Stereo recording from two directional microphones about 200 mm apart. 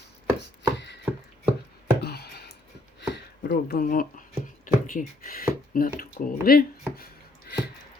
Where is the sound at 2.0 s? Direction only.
50° left (ahead or behind).